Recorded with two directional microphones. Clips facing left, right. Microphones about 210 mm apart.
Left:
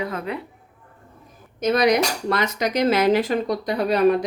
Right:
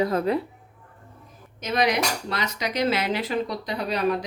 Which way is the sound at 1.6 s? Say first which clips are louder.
Left 5 dB; 45° left (ahead or behind).